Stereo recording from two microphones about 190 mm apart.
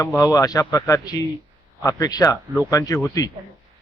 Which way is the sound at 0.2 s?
20° left (ahead or behind).